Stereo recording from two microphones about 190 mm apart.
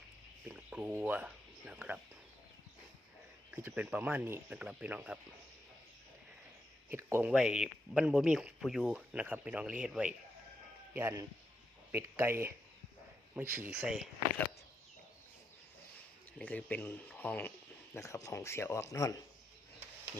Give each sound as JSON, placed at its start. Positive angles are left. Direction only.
{"t": 0.4, "sound": "speech", "side_deg": -5}
{"t": 3.5, "sound": "speech", "side_deg": -10}
{"t": 6.9, "sound": "speech", "side_deg": -10}
{"t": 16.4, "sound": "speech", "side_deg": 5}